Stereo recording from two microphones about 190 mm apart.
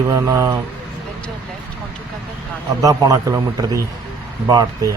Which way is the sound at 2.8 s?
20° right (ahead or behind).